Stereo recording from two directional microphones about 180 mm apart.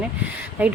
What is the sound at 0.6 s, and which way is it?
Speech, 10° right (ahead or behind).